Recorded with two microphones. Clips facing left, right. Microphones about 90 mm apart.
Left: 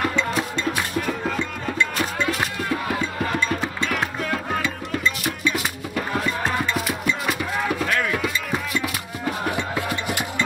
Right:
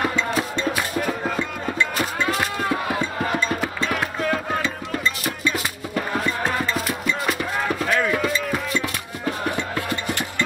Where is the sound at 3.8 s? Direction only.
Centre (ahead or behind).